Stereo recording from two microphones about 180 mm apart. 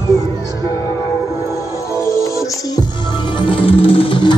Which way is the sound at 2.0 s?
15° left (ahead or behind).